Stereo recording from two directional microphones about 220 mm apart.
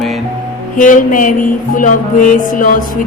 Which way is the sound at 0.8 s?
35° left (ahead or behind).